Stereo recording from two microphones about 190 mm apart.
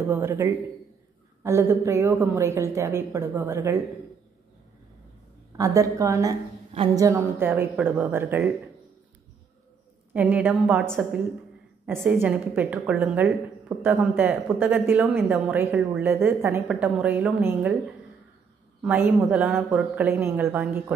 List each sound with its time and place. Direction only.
0.1 s a woman's voice: 10° right (ahead or behind)
5.6 s a woman's voice: 15° right (ahead or behind)
10.1 s a woman's voice: 10° right (ahead or behind)
18.8 s a woman's voice: 10° right (ahead or behind)